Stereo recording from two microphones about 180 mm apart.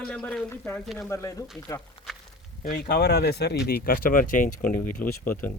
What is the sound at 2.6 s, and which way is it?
Speech, 55° left (ahead or behind).